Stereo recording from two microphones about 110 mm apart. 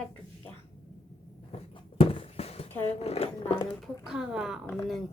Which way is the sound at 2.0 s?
60° left (ahead or behind).